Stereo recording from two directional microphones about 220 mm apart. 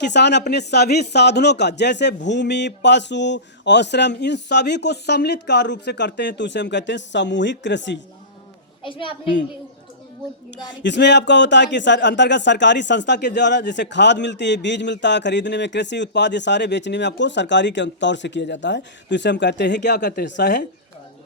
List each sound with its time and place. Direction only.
0.0 s a man's voice: 50° left (ahead or behind)
8.8 s a child's voice: 20° left (ahead or behind)
10.8 s a man's voice: 50° left (ahead or behind)